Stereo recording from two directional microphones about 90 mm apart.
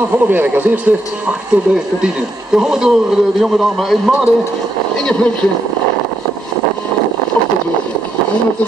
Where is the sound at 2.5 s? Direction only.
5° right (ahead or behind).